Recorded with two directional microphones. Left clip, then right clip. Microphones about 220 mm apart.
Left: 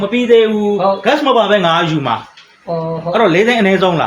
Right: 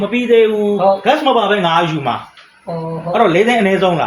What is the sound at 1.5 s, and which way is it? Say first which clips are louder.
Speech: left 2 dB; 35° left (ahead or behind).